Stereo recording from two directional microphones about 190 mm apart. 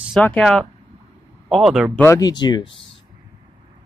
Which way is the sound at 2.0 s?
15° left (ahead or behind).